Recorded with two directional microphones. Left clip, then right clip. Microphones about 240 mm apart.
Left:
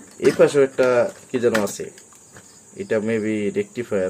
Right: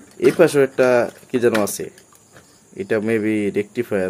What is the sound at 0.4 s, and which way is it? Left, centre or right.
Speech, right.